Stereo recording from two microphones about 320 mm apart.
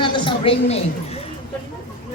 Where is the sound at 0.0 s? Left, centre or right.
Centre.